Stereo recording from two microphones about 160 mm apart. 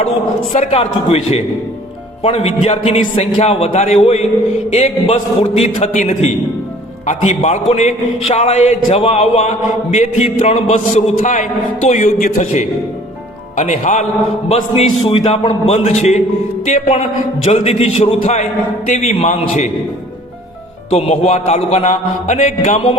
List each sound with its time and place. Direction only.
0.7 s a man's voice: 35° left (ahead or behind)
20.9 s a man's voice: 45° left (ahead or behind)